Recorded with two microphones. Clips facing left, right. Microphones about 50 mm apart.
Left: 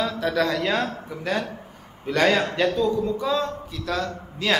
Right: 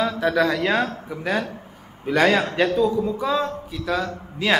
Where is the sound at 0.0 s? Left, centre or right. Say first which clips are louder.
Right 3 dB; centre.